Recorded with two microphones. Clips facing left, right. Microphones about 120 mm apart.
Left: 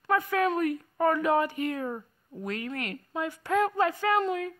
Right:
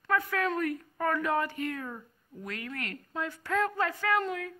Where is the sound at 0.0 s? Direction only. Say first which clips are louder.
Left 4 dB; 20° left (ahead or behind).